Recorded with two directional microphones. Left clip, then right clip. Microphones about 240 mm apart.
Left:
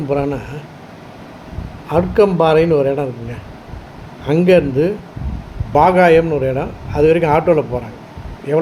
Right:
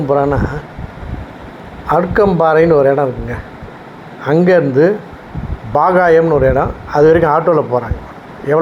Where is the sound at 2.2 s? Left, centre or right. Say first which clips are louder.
Right 1 dB; centre.